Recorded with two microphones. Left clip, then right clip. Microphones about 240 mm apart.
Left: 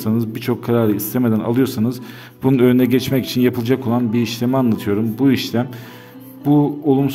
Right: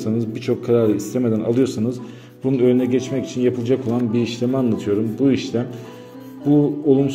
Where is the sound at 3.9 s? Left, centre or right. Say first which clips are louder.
Left 2 dB; left.